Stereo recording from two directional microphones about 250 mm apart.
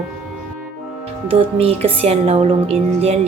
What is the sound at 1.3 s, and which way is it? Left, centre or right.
Music, right.